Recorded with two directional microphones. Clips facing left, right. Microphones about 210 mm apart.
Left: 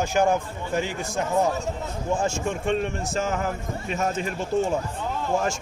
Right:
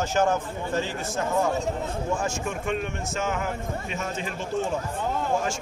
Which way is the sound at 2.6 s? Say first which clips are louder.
Left 5 dB; 35° left (ahead or behind).